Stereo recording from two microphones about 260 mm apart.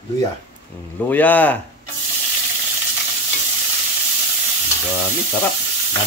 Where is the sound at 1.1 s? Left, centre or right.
Centre.